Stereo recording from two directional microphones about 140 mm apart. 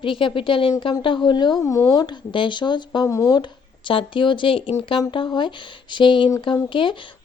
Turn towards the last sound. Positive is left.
turn(degrees=35)  # may be behind; listen again after turning